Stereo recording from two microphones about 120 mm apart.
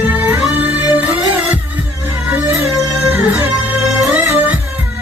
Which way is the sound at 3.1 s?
20° right (ahead or behind).